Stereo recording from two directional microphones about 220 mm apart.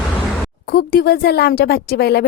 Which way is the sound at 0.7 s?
45° left (ahead or behind).